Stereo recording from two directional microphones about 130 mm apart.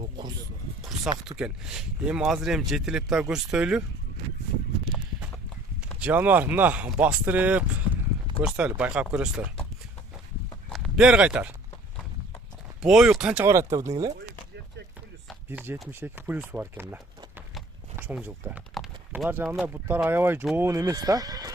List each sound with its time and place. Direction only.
0.8 s a sound: centre (ahead or behind)
1.4 s speech: 5° right (ahead or behind)
6.0 s speech: 15° right (ahead or behind)
10.7 s clip-clop: centre (ahead or behind)
11.0 s speech: 10° right (ahead or behind)
12.8 s speech: 5° right (ahead or behind)
13.5 s speech: 20° right (ahead or behind)
15.4 s speech: 15° right (ahead or behind)